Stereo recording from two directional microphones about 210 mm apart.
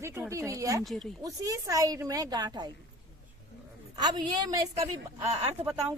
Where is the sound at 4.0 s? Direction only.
20° right (ahead or behind).